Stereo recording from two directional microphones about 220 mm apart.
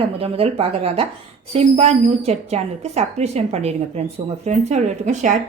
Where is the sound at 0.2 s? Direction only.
25° right (ahead or behind).